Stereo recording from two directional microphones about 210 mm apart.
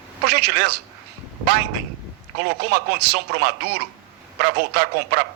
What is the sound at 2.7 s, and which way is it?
Speech, 50° right (ahead or behind).